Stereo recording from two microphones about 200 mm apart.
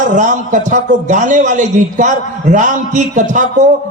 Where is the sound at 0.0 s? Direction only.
40° right (ahead or behind).